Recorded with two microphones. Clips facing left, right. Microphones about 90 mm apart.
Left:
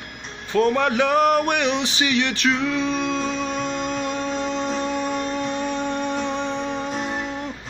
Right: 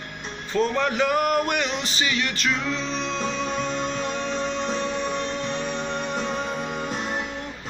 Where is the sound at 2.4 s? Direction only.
70° left (ahead or behind); by 3.2 s 50° left (ahead or behind).